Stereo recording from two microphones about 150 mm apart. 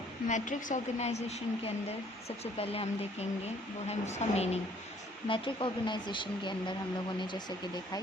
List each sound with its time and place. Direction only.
0.3 s a woman's voice: 55° left (ahead or behind)
5.3 s speech: 35° left (ahead or behind)